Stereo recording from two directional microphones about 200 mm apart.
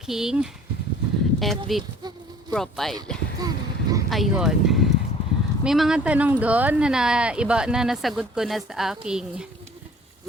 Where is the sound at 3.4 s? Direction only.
20° right (ahead or behind).